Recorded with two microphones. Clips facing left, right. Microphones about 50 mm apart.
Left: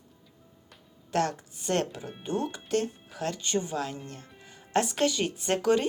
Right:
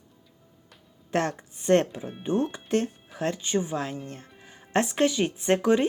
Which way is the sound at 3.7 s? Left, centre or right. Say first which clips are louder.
Right 2 dB; right.